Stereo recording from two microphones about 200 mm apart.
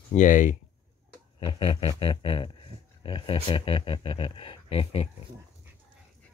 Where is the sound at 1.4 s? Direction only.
25° left (ahead or behind).